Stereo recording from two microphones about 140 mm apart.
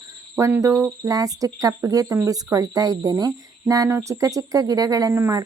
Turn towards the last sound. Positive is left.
turn(degrees=-20)  # may be behind; listen again after turning